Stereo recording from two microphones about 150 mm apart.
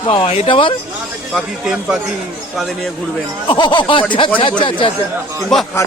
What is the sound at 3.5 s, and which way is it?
Speech, 30° left (ahead or behind).